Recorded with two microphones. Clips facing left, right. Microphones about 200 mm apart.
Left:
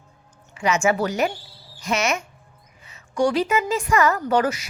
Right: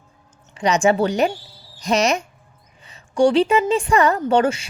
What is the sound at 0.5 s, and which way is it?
A woman's voice, 35° right (ahead or behind).